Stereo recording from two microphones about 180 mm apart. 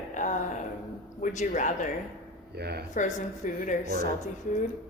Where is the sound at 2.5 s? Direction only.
65° right (ahead or behind).